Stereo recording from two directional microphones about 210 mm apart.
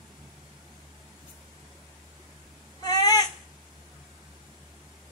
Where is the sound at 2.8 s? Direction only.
20° left (ahead or behind).